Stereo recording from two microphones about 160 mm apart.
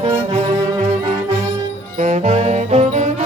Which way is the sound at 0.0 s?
45° right (ahead or behind).